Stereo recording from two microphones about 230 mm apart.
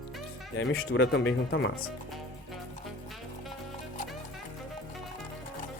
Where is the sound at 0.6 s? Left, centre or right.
Left.